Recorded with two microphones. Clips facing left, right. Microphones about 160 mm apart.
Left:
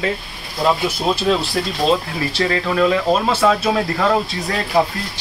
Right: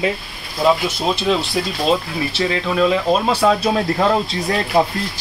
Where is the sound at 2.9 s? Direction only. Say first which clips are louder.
Even; 15° right (ahead or behind).